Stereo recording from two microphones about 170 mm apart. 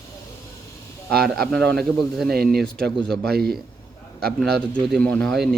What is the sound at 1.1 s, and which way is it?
Speech, 65° right (ahead or behind).